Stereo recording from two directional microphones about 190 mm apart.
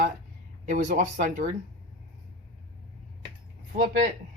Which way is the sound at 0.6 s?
40° right (ahead or behind).